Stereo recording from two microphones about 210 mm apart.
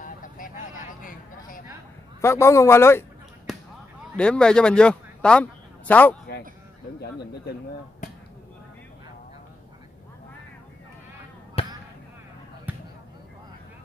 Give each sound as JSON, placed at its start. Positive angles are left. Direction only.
{"t": 0.0, "sound": "vehicle", "side_deg": 40}
{"t": 2.2, "sound": "speech", "side_deg": 15}
{"t": 4.2, "sound": "a man's voice", "side_deg": 5}
{"t": 11.6, "sound": "basketball bounce", "side_deg": 30}